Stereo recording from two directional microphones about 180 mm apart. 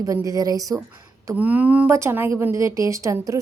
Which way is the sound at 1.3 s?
10° right (ahead or behind).